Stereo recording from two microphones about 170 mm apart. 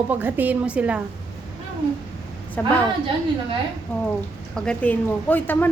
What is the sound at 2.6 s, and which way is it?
Speech, 10° left (ahead or behind).